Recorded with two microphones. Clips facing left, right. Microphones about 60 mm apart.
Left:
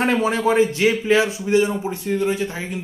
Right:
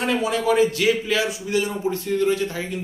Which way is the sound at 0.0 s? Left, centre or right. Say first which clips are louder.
Left 3 dB; left.